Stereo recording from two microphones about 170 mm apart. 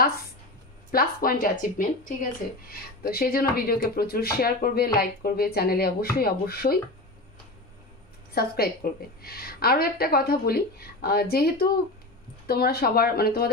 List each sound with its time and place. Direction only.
0.9 s speech: 55° left (ahead or behind)
8.4 s speech: 65° left (ahead or behind)